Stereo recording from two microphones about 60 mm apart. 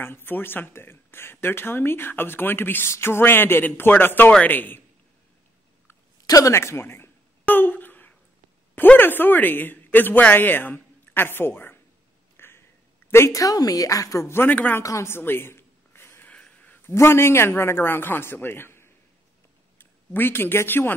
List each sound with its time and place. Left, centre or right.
0.0 s speech: left
6.2 s speech: left
6.5 s speech: left
7.4 s a sound: left
13.3 s a woman's voice: left
14.5 s a man's voice: left
14.8 s speech: left
15.0 s a sound: left
16.3 s a sound: centre
16.8 s speech: left